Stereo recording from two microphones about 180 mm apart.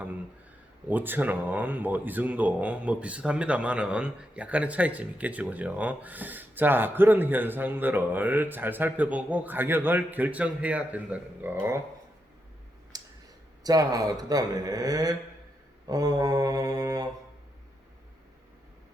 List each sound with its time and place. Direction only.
0.9 s speech: 10° right (ahead or behind)
12.9 s a sound: 20° right (ahead or behind)
13.7 s speech: 20° right (ahead or behind)